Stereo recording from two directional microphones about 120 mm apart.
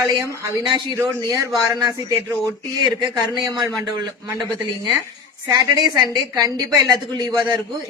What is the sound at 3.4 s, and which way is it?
Speech, 35° right (ahead or behind).